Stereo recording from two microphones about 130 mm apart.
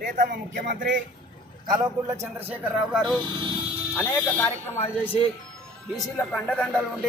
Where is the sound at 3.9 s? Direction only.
15° left (ahead or behind).